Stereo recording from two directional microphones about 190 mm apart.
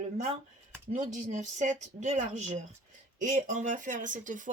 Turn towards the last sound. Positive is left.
turn(degrees=-40)  # may be behind; listen again after turning